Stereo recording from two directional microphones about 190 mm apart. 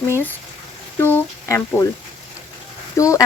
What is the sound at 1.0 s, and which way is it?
Speech, 10° left (ahead or behind).